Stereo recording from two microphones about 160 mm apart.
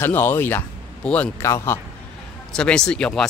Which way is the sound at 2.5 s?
5° left (ahead or behind).